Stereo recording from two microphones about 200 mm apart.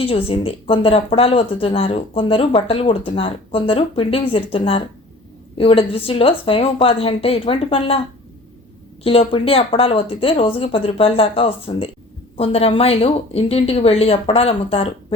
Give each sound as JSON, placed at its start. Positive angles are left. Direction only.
{"t": 0.0, "sound": "speech", "side_deg": 30}
{"t": 9.0, "sound": "speech", "side_deg": 30}